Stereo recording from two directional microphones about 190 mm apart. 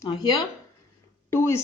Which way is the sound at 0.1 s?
20° left (ahead or behind).